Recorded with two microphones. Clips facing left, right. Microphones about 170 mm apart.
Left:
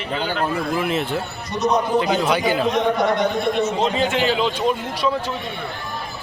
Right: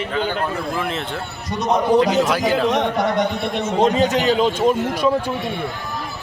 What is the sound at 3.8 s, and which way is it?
Speech, 40° right (ahead or behind).